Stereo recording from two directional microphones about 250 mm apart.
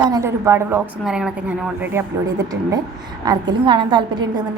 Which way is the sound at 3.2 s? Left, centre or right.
Centre.